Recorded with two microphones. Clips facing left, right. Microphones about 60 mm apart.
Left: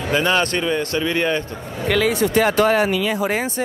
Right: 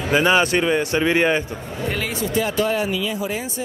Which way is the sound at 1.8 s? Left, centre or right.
Left.